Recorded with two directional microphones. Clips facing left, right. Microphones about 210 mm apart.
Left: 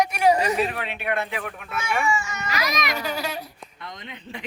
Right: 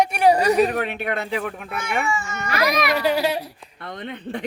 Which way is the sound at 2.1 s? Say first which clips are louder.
Right 1 dB; 50° right (ahead or behind).